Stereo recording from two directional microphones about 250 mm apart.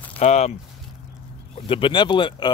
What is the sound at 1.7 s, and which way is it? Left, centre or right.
Speech, centre.